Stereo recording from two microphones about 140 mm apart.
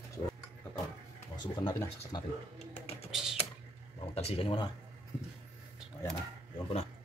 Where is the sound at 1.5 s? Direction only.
35° left (ahead or behind).